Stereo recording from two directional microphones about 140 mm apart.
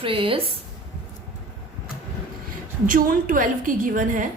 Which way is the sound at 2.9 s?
75° right (ahead or behind).